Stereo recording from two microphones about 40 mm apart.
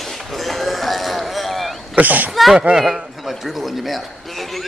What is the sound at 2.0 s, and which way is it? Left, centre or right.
Speech, right.